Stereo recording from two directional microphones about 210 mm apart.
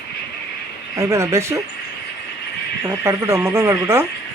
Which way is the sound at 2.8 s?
15° right (ahead or behind).